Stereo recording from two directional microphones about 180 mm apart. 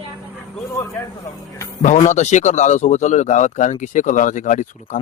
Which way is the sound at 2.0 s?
40° left (ahead or behind).